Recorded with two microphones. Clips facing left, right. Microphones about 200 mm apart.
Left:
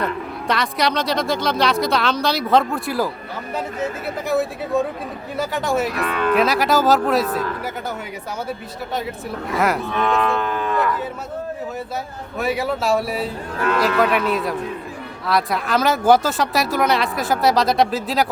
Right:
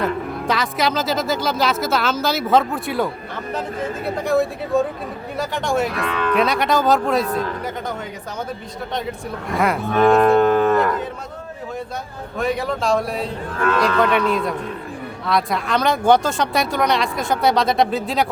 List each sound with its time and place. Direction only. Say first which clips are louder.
0.0 s speech: right 2 dB; centre (ahead or behind)
9.5 s speech: even; centre (ahead or behind)
9.9 s livestock: right 7 dB; 45° right (ahead or behind)
12.4 s speech: even; 5° left (ahead or behind)